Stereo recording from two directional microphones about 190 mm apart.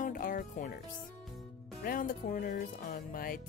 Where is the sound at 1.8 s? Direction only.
45° left (ahead or behind).